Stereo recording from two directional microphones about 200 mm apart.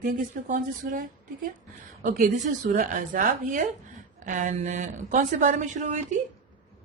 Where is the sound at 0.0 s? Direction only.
40° right (ahead or behind).